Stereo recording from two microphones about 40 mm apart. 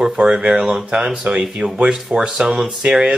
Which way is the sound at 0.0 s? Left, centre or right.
Centre.